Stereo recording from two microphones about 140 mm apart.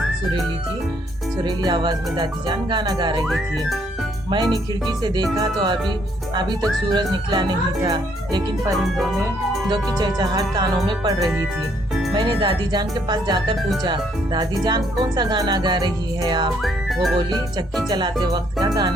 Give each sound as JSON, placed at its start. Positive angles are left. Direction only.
{"t": 1.4, "sound": "speech", "side_deg": -30}
{"t": 3.2, "sound": "music", "side_deg": 0}
{"t": 4.3, "sound": "speech", "side_deg": -30}
{"t": 8.7, "sound": "music", "side_deg": 0}
{"t": 9.6, "sound": "speech", "side_deg": -30}
{"t": 16.6, "sound": "music", "side_deg": 0}
{"t": 17.8, "sound": "speech", "side_deg": -30}